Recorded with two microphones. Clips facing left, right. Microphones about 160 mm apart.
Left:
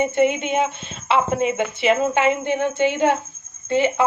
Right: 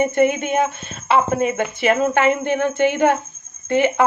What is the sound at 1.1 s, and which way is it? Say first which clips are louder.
Speech: right 2 dB; 45° right (ahead or behind).